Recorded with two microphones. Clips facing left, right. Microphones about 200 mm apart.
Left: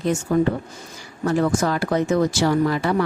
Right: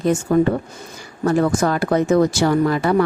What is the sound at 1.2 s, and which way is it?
Speech, 55° right (ahead or behind).